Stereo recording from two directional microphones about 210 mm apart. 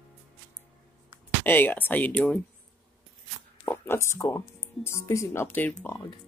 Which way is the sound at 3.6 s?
10° left (ahead or behind).